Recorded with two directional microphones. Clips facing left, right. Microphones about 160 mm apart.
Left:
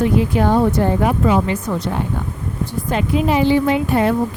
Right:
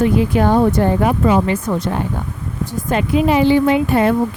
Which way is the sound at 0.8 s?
60° right (ahead or behind).